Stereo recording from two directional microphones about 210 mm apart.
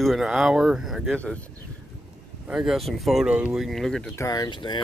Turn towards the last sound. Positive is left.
turn(degrees=20)  # may be behind; listen again after turning